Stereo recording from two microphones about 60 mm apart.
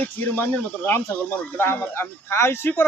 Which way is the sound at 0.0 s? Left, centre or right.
Left.